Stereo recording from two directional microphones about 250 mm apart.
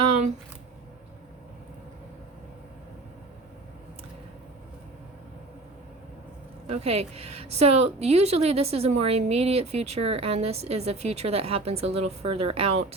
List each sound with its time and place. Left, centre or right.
6.7 s a woman's voice: right